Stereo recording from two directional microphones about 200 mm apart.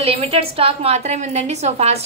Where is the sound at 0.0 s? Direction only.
30° right (ahead or behind).